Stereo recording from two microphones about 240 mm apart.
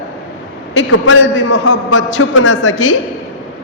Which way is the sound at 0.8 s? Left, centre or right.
Left.